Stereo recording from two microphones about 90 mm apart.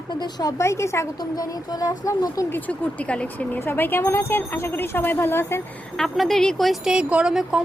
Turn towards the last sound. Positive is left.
turn(degrees=-10)  # may be behind; listen again after turning